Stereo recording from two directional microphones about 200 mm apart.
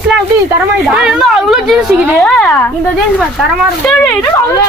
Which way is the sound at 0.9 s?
Centre (ahead or behind).